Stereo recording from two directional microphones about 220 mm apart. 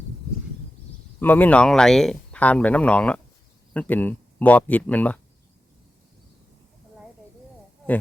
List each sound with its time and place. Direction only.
1.2 s speech: 10° left (ahead or behind)